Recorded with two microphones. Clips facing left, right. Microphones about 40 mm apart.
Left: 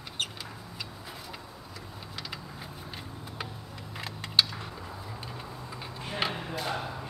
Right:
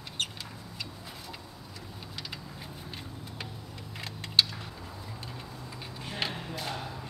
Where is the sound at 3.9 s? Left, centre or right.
Centre.